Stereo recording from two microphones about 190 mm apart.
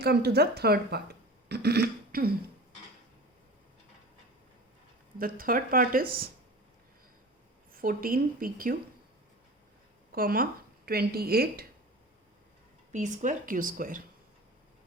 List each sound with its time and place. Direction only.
0.0 s a woman's voice: 60° right (ahead or behind)
1.5 s throat clearing: 60° right (ahead or behind)
5.1 s a woman's voice: 50° right (ahead or behind)
7.7 s a woman's voice: 50° right (ahead or behind)
10.1 s speech: 50° right (ahead or behind)
12.9 s a woman's voice: 40° right (ahead or behind)